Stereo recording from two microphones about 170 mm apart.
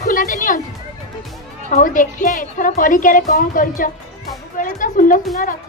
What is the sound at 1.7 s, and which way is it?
A woman's voice, 50° left (ahead or behind).